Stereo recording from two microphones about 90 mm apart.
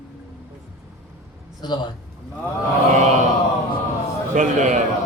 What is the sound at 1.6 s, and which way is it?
Speech, 55° left (ahead or behind).